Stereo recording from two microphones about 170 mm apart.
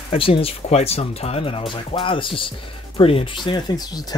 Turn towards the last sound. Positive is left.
turn(degrees=25)  # may be behind; listen again after turning